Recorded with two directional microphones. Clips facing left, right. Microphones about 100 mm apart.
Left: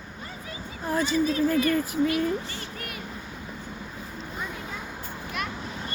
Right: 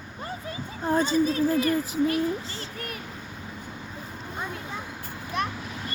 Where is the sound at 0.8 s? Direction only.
35° right (ahead or behind).